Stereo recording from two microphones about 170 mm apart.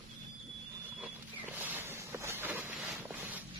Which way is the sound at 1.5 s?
10° right (ahead or behind).